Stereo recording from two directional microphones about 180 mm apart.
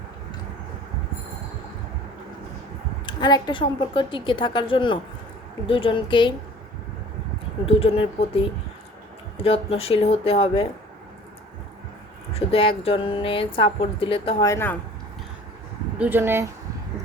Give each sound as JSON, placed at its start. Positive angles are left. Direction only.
{"t": 3.1, "sound": "speech", "side_deg": 25}
{"t": 7.8, "sound": "a woman's voice", "side_deg": 30}
{"t": 12.3, "sound": "a woman's voice", "side_deg": 30}
{"t": 14.4, "sound": "speech", "side_deg": 15}
{"t": 16.0, "sound": "speech", "side_deg": -10}